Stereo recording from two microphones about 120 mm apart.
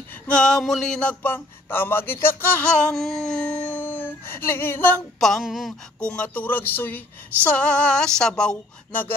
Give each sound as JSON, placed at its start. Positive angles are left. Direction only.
{"t": 0.3, "sound": "speech", "side_deg": 5}
{"t": 5.2, "sound": "speech", "side_deg": 0}